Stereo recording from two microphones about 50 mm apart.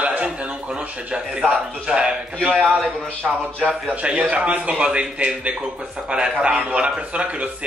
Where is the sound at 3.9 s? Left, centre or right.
Right.